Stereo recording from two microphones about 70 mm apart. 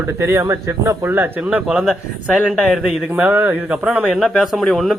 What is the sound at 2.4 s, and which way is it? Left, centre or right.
Speech, centre.